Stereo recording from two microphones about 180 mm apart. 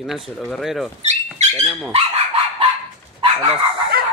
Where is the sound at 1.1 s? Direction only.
40° right (ahead or behind).